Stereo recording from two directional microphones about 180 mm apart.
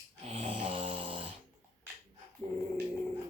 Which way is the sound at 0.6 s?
35° right (ahead or behind).